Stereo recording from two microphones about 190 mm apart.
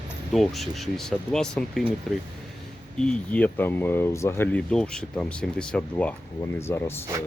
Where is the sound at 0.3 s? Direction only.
Centre (ahead or behind).